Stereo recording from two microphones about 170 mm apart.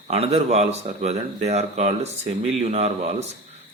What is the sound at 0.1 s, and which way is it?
Speech, 40° right (ahead or behind).